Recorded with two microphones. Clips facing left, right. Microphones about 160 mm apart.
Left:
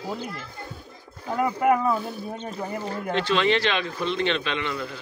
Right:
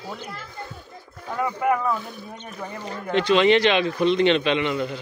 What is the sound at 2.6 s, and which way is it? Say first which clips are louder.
Speech: left 1 dB; 10° left (ahead or behind).